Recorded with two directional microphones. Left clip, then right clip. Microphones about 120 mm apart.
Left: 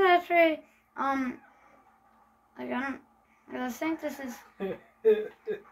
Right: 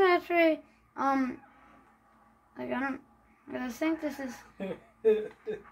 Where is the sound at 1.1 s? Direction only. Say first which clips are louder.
Right 2 dB; 55° right (ahead or behind).